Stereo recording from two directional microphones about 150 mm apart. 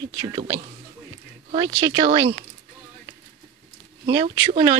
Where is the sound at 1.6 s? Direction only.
25° right (ahead or behind).